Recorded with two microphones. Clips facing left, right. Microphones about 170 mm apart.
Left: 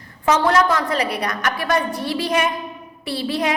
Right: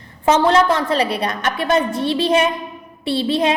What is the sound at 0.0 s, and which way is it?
A woman's voice, 25° right (ahead or behind).